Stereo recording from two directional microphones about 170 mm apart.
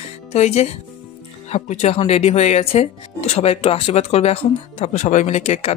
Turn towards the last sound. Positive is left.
turn(degrees=40)  # may be behind; listen again after turning